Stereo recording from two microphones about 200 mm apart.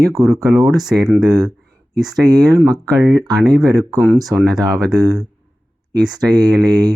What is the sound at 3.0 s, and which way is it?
Speech, centre (ahead or behind).